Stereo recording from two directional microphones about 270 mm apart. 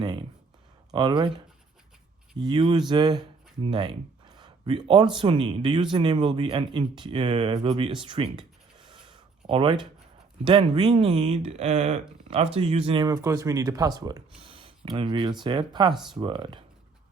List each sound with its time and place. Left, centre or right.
0.0 s speech: centre
2.4 s speech: centre
4.4 s a sound: centre
5.1 s speech: centre
8.9 s a sound: centre
10.4 s speech: centre
15.9 s speech: centre
16.1 s speech: centre